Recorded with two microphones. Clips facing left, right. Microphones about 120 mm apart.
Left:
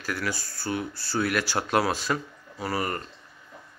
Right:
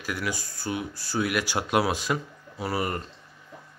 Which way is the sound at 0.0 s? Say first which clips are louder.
Even; 15° right (ahead or behind).